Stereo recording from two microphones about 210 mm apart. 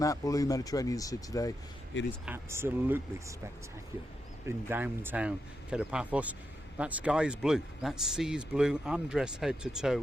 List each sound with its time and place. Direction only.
0.0 s speech: 15° left (ahead or behind)
2.2 s speech: 10° right (ahead or behind)
4.4 s speech: 10° right (ahead or behind)